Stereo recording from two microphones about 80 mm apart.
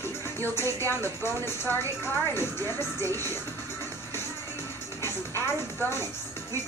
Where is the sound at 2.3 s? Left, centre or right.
Left.